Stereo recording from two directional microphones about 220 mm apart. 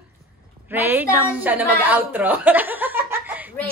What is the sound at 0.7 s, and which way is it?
A woman's voice, 10° right (ahead or behind).